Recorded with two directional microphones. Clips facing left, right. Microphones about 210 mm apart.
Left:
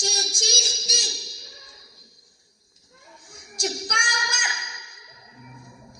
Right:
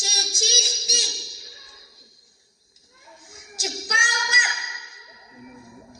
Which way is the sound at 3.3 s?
Centre (ahead or behind).